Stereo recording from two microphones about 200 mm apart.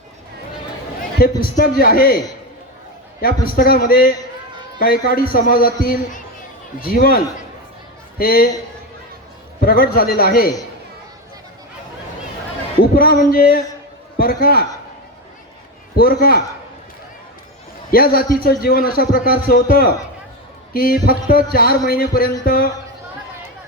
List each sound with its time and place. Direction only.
1.4 s a man's voice: 45° left (ahead or behind)
3.4 s a man's voice: 45° left (ahead or behind)
8.2 s a man's voice: 50° left (ahead or behind)
9.6 s a man's voice: 50° left (ahead or behind)
12.8 s a man's voice: 50° left (ahead or behind)
16.0 s a man's voice: 50° left (ahead or behind)
17.9 s a man's voice: 50° left (ahead or behind)